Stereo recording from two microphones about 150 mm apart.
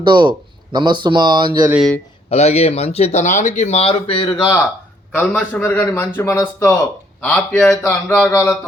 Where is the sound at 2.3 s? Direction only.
45° left (ahead or behind).